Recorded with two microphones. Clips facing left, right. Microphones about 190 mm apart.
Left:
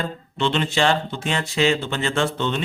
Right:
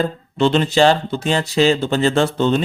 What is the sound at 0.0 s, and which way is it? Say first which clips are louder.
A man's voice: right 7 dB; 40° right (ahead or behind).